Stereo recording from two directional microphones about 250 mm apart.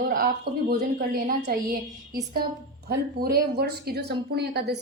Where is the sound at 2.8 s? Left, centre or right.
Right.